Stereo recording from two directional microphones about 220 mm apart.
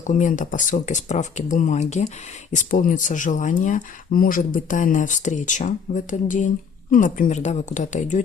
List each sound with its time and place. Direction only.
0.1 s speech: 35° left (ahead or behind)